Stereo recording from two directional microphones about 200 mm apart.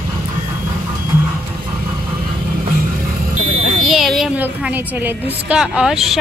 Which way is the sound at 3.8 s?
Centre (ahead or behind).